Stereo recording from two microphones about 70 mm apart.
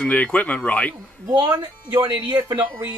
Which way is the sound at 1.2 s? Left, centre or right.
Right.